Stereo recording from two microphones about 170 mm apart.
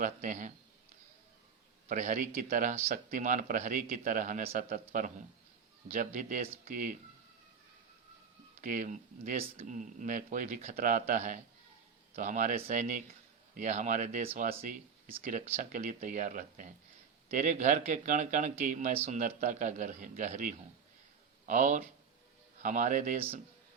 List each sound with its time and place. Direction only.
0.0 s speech: 45° right (ahead or behind)
1.9 s speech: 50° right (ahead or behind)
6.1 s speech: 50° right (ahead or behind)
8.6 s speech: 50° right (ahead or behind)